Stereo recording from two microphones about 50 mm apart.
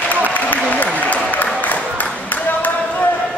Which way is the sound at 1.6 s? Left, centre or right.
Left.